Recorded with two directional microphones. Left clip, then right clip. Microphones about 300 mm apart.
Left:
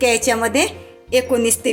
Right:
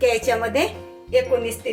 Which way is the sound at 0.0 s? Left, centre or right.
Left.